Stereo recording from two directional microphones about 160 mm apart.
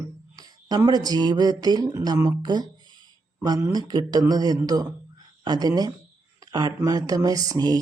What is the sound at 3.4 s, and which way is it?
A man's voice, 25° right (ahead or behind).